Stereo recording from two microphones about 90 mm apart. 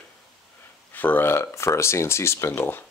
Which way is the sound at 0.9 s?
20° left (ahead or behind).